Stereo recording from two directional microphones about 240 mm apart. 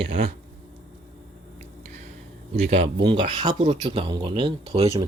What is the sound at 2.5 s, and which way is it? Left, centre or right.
Speech, right.